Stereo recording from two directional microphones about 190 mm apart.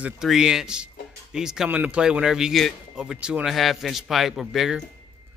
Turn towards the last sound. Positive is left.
turn(degrees=0)  # may be behind; listen again after turning